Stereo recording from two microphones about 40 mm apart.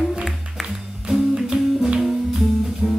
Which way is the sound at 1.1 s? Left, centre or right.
Centre.